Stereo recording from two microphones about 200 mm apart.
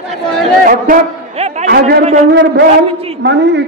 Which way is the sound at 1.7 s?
50° right (ahead or behind).